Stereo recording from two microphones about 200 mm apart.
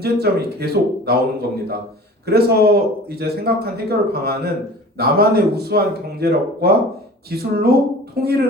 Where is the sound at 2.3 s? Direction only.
50° right (ahead or behind).